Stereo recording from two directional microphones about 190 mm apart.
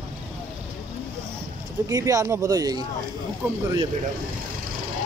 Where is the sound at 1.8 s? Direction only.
15° right (ahead or behind).